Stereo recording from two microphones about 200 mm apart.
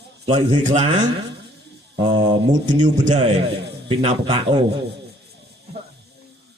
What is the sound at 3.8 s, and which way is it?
Mantra, 25° right (ahead or behind).